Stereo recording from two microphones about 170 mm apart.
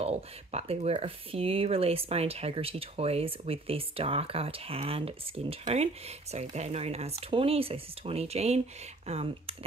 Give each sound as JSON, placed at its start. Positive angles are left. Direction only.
{"t": 0.0, "sound": "speech", "side_deg": -40}